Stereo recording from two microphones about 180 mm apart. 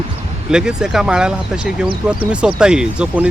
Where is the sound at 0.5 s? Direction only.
5° right (ahead or behind).